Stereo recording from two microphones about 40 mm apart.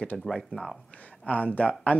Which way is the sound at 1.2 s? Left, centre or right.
Left.